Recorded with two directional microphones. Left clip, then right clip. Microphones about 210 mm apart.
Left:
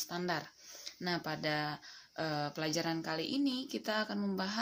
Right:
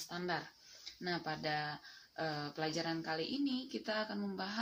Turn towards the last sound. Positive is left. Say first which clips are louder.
# left 4 dB
turn(degrees=50)  # may be behind; listen again after turning